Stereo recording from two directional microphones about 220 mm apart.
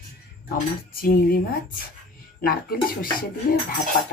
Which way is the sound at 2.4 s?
40° left (ahead or behind).